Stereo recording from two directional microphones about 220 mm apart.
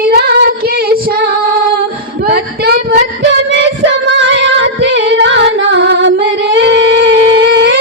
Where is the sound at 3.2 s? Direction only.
55° right (ahead or behind).